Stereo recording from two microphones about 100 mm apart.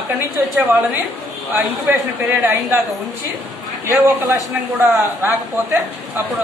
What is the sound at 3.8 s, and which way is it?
A man's voice, 25° right (ahead or behind).